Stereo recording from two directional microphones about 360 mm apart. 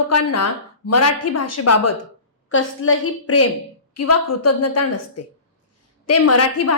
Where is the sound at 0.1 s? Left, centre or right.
Left.